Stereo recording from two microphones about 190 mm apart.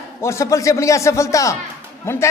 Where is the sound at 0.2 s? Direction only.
15° left (ahead or behind).